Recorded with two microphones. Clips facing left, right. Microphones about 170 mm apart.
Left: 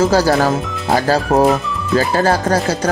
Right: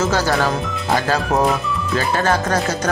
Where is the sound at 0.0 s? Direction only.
35° left (ahead or behind).